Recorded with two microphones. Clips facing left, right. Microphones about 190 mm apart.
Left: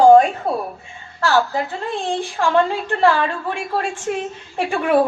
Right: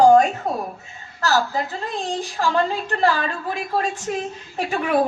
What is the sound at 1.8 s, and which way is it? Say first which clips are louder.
A woman's voice: left 3 dB; 40° right (ahead or behind).